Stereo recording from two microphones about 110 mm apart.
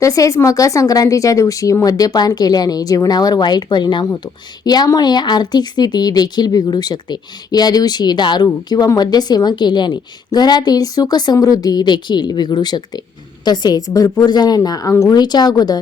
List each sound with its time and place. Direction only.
0.0 s a woman's voice: 30° left (ahead or behind)